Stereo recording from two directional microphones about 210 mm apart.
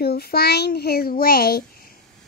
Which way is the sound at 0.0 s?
50° left (ahead or behind).